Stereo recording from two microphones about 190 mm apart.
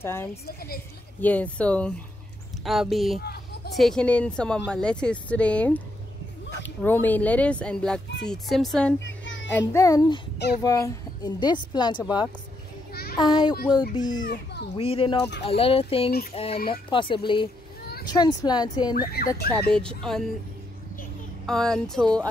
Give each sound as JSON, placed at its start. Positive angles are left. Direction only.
{"t": 0.0, "sound": "speech", "side_deg": 15}
{"t": 3.2, "sound": "a sound", "side_deg": 55}
{"t": 3.7, "sound": "speech", "side_deg": 0}
{"t": 9.0, "sound": "children playing", "side_deg": 75}
{"t": 9.7, "sound": "speech", "side_deg": 15}
{"t": 14.2, "sound": "a child's voice", "side_deg": 60}
{"t": 14.8, "sound": "speech", "side_deg": 30}
{"t": 16.1, "sound": "speech", "side_deg": 50}
{"t": 16.9, "sound": "speech", "side_deg": 25}
{"t": 18.9, "sound": "speech", "side_deg": 55}
{"t": 19.7, "sound": "speech", "side_deg": 5}
{"t": 21.5, "sound": "speech", "side_deg": 5}